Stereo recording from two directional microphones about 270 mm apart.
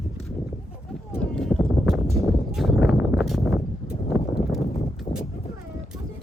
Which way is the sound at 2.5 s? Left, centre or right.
Centre.